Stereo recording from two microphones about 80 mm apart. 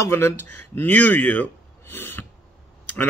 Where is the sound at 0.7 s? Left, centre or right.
Centre.